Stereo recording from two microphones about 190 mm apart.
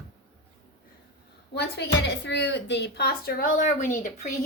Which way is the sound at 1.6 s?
65° left (ahead or behind).